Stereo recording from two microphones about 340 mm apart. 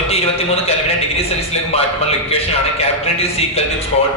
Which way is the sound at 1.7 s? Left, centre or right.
Centre.